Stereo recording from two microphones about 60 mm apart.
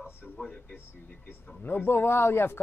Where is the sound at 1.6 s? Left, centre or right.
Left.